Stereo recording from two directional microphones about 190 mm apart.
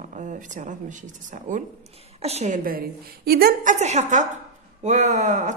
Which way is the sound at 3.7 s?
40° right (ahead or behind).